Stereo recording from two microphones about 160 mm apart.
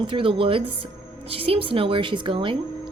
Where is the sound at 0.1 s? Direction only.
35° right (ahead or behind).